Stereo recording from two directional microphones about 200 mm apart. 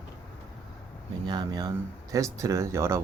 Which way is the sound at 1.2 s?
20° right (ahead or behind).